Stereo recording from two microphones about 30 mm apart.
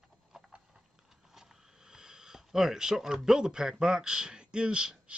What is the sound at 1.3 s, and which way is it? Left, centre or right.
Sniff, centre.